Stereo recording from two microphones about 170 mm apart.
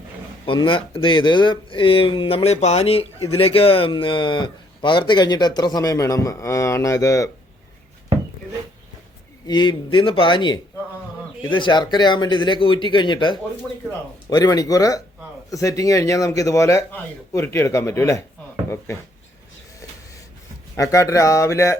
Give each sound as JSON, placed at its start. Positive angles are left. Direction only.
{"t": 0.4, "sound": "speech", "side_deg": 30}
{"t": 9.5, "sound": "a man's voice", "side_deg": 25}
{"t": 20.7, "sound": "speech", "side_deg": 20}